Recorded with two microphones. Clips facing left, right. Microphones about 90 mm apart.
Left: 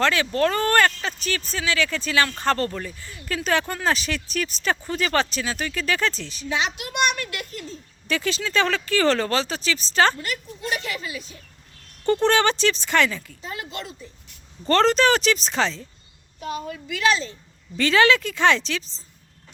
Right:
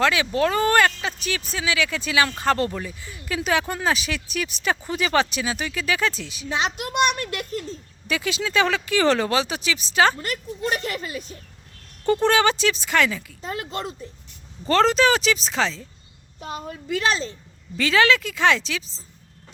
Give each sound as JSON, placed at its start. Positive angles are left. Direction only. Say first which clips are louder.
{"t": 0.0, "sound": "speech", "louder": "even", "side_deg": -10}
{"t": 6.6, "sound": "a child's voice", "louder": "right 3 dB", "side_deg": -40}
{"t": 8.0, "sound": "speech", "louder": "even", "side_deg": -10}
{"t": 10.2, "sound": "a child's voice", "louder": "right 3 dB", "side_deg": -40}
{"t": 12.0, "sound": "speech", "louder": "even", "side_deg": -5}
{"t": 13.4, "sound": "a child's voice", "louder": "right 5 dB", "side_deg": -40}
{"t": 14.6, "sound": "speech", "louder": "even", "side_deg": -5}
{"t": 16.9, "sound": "a child's voice", "louder": "left 1 dB", "side_deg": -35}
{"t": 17.7, "sound": "speech", "louder": "left 1 dB", "side_deg": 0}